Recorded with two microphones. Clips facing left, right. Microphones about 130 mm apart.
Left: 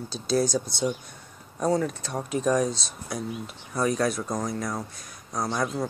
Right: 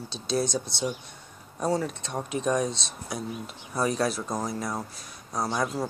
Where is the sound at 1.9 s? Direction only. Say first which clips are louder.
Left 2 dB; 25° right (ahead or behind).